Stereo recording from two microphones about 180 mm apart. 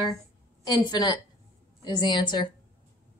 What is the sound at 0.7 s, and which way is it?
A woman's voice, 20° left (ahead or behind).